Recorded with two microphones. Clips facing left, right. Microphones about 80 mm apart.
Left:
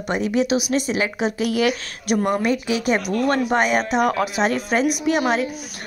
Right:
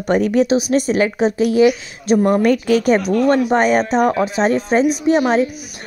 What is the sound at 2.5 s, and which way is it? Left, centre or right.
Speech, right.